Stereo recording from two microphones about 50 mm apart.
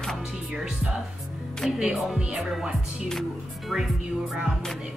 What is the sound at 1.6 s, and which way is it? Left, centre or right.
Speech, centre.